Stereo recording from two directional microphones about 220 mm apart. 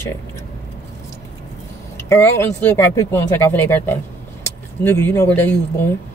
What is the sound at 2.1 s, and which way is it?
Speech, 10° left (ahead or behind).